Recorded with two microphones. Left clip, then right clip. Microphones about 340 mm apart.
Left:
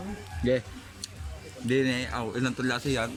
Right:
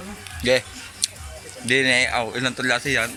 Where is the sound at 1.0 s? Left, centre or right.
Centre.